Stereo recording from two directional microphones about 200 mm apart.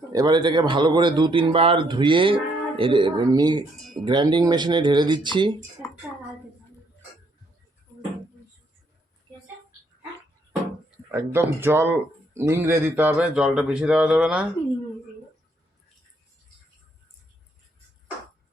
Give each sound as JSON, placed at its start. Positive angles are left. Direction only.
{"t": 0.1, "sound": "speech", "side_deg": -20}
{"t": 11.1, "sound": "speech", "side_deg": -15}